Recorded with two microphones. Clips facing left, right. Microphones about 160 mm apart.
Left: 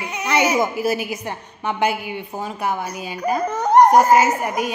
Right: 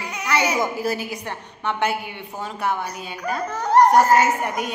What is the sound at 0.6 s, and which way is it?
A woman's voice, 10° left (ahead or behind).